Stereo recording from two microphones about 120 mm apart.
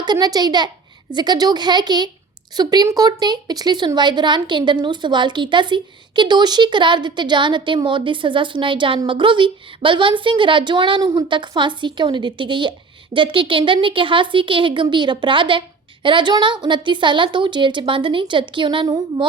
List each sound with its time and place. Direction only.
0.0 s a woman's voice: 35° right (ahead or behind)